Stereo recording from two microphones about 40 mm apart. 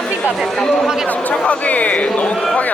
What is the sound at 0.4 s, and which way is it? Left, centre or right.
Speech, centre.